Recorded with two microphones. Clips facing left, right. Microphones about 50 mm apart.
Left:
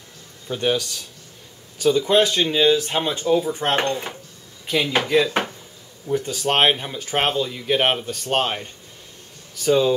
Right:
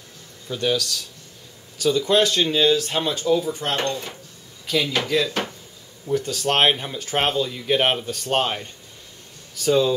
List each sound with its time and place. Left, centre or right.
0.5 s speech: left
6.0 s speech: centre